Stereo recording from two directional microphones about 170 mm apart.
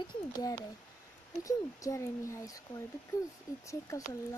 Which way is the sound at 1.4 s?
20° left (ahead or behind).